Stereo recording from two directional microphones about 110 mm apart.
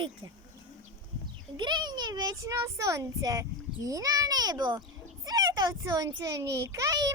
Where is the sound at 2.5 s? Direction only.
25° right (ahead or behind).